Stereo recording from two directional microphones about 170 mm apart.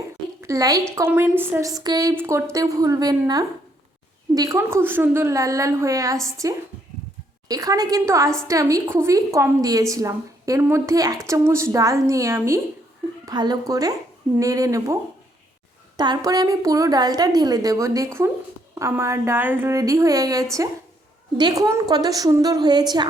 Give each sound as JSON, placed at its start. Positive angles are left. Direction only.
{"t": 0.4, "sound": "a woman's voice", "side_deg": -20}
{"t": 16.0, "sound": "a woman's voice", "side_deg": -25}